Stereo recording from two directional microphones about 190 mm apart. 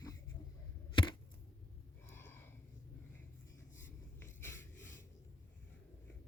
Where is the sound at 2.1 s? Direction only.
10° left (ahead or behind).